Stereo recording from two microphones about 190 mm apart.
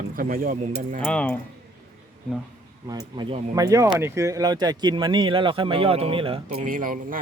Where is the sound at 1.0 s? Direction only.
5° left (ahead or behind).